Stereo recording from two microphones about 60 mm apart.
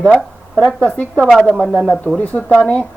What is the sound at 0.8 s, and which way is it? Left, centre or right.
Speech, left.